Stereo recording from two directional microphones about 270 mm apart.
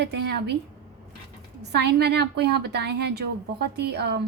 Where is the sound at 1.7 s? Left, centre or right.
Right.